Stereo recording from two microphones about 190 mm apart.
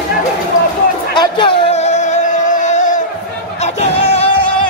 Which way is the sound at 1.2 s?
25° left (ahead or behind).